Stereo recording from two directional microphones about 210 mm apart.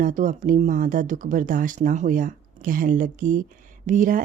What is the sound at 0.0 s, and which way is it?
Speech, 40° right (ahead or behind).